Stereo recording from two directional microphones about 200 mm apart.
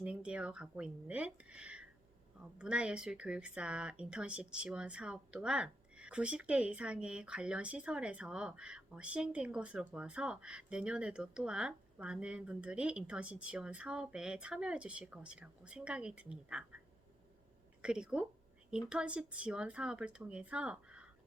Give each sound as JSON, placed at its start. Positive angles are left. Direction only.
{"t": 0.0, "sound": "speech", "side_deg": -5}
{"t": 17.8, "sound": "speech", "side_deg": -5}